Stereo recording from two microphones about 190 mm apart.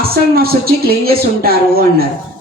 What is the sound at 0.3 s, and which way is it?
A man's voice, 55° right (ahead or behind).